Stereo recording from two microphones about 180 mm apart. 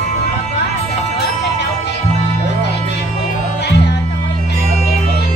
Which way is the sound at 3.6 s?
70° left (ahead or behind).